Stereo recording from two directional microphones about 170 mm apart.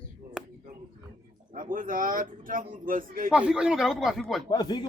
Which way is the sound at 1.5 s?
50° right (ahead or behind).